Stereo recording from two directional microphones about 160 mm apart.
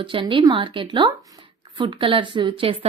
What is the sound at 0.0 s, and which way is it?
A woman's voice, 30° right (ahead or behind).